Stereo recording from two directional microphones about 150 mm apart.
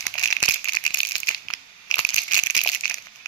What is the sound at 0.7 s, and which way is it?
Rattle, 30° left (ahead or behind).